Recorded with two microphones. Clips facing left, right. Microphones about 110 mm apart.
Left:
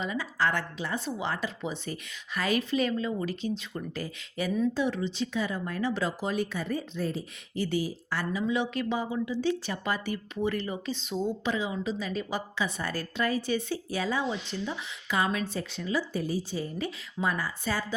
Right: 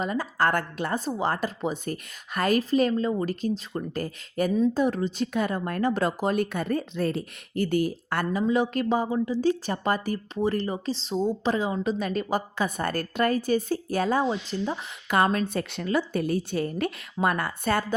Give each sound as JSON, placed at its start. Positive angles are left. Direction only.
{"t": 0.0, "sound": "speech", "side_deg": -45}